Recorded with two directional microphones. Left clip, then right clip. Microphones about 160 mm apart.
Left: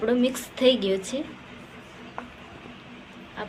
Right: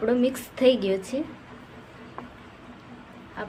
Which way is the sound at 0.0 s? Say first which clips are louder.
Even; 15° right (ahead or behind).